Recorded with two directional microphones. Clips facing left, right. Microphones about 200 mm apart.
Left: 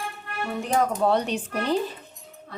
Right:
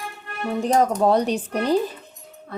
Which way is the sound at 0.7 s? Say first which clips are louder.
Right 4 dB; 40° right (ahead or behind).